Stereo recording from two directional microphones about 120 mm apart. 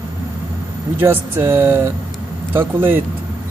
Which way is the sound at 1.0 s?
20° right (ahead or behind).